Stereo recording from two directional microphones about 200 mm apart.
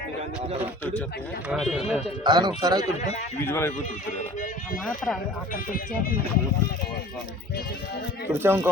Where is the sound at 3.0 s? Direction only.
35° left (ahead or behind).